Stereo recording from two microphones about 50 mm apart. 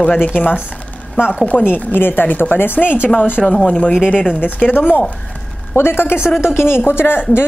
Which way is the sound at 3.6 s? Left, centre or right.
Left.